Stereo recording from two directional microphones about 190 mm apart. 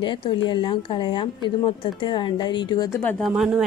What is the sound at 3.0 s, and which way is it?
Speech, 10° left (ahead or behind).